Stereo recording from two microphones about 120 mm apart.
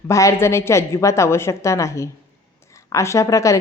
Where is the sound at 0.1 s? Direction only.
25° left (ahead or behind).